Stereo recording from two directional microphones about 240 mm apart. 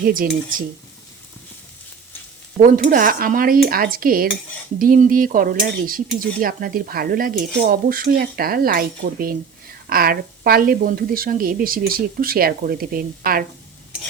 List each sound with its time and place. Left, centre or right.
0.0 s speech: right
2.9 s speech: right